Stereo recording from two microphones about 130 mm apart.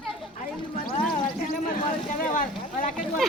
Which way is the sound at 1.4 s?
90° left.